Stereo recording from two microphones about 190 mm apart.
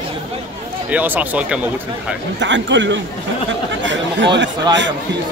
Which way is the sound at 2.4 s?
70° right (ahead or behind).